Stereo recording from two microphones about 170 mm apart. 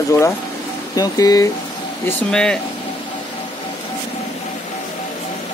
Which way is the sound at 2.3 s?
5° left (ahead or behind).